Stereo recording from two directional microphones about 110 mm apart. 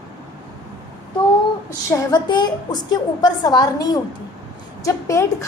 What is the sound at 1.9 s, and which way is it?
A woman's voice, 35° left (ahead or behind).